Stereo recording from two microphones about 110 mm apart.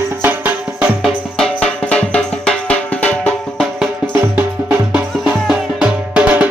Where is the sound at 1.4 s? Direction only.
5° left (ahead or behind).